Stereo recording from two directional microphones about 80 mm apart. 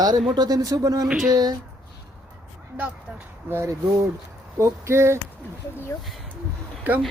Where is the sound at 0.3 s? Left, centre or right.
Right.